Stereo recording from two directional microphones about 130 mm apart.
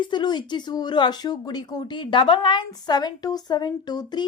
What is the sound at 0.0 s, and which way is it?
Speech, 35° left (ahead or behind).